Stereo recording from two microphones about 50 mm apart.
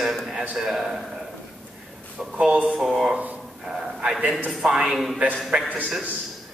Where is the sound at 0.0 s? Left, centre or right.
Centre.